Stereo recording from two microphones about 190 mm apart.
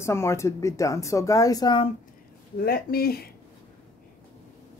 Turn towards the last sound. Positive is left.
turn(degrees=55)  # may be behind; listen again after turning